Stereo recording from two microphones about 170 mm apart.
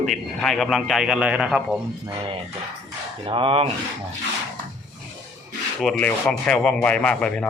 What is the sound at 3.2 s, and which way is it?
Speech, 30° right (ahead or behind).